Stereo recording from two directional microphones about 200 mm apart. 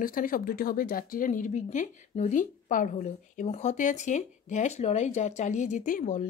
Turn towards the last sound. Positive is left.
turn(degrees=40)  # may be behind; listen again after turning